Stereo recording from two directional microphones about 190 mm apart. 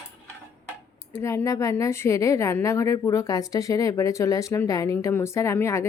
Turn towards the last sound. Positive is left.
turn(degrees=15)  # may be behind; listen again after turning